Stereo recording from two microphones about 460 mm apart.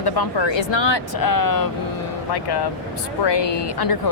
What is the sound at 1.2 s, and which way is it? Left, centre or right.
Speech, left.